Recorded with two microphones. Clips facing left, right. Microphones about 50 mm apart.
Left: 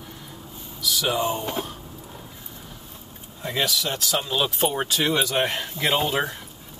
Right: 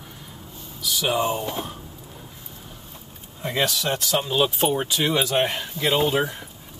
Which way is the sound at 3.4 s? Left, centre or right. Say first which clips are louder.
Right 1 dB; centre.